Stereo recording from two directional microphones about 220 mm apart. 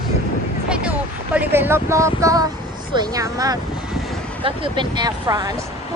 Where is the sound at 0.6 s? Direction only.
5° right (ahead or behind).